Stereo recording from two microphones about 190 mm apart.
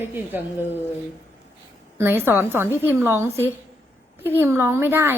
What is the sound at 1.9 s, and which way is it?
Speech, 10° right (ahead or behind).